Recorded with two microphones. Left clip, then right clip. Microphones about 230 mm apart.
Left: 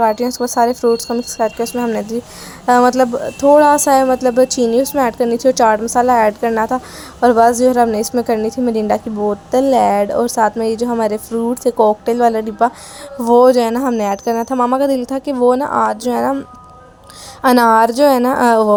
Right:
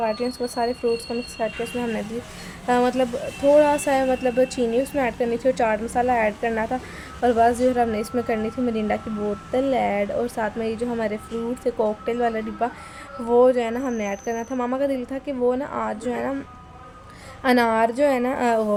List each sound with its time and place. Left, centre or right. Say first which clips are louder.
0.0 s speech: left 9 dB; left
17.4 s speech: left 9 dB; left